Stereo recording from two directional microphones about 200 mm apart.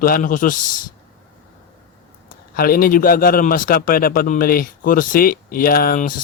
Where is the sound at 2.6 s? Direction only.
45° left (ahead or behind).